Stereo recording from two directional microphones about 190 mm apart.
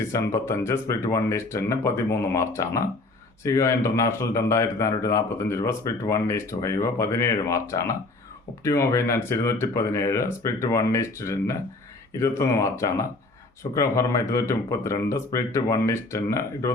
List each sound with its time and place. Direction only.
0.0 s speech: 15° left (ahead or behind)